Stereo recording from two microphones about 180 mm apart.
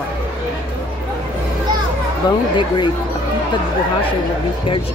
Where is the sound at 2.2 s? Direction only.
25° left (ahead or behind).